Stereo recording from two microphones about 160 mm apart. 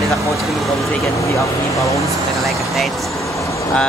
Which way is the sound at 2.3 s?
Centre (ahead or behind).